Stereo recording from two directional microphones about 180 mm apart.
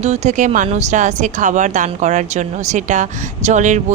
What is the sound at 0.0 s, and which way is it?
Speech, 40° right (ahead or behind).